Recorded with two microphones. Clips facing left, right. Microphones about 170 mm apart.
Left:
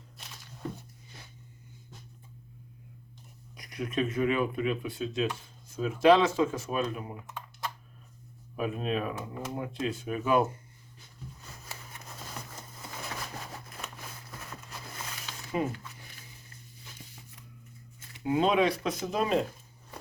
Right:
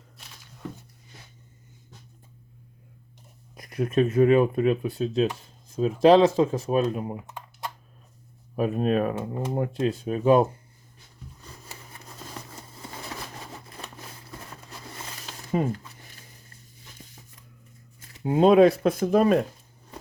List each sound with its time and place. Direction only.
3.5 s speech: 50° right (ahead or behind)
8.5 s speech: 40° right (ahead or behind)
9.7 s speech: 35° right (ahead or behind)
15.3 s a sound: 40° right (ahead or behind)
18.1 s speech: 40° right (ahead or behind)